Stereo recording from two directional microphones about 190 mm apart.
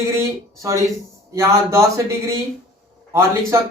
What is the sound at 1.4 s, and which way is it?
Speech, 15° right (ahead or behind).